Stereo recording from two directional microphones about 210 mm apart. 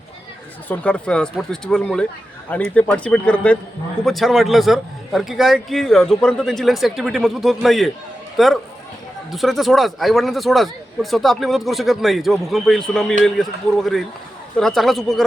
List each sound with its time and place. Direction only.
0.7 s a man's voice: 5° left (ahead or behind)